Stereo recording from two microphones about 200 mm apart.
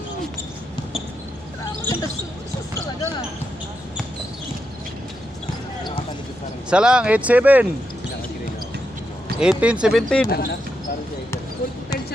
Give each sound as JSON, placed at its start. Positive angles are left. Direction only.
{"t": 1.8, "sound": "basketball bounce", "side_deg": 15}
{"t": 6.7, "sound": "speech", "side_deg": -5}
{"t": 9.4, "sound": "speech", "side_deg": -5}
{"t": 10.2, "sound": "speech", "side_deg": 50}